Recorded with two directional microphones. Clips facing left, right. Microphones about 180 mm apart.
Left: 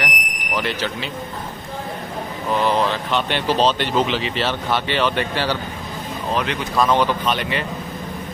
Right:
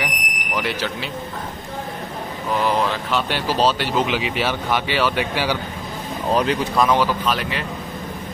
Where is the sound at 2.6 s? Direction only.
5° right (ahead or behind).